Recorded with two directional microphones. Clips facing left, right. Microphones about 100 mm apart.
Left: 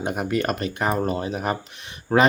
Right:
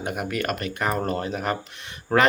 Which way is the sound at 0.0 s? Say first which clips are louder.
Left 3 dB; 25° left (ahead or behind).